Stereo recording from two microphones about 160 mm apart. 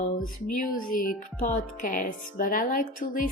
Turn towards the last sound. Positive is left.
turn(degrees=60)  # may be behind; listen again after turning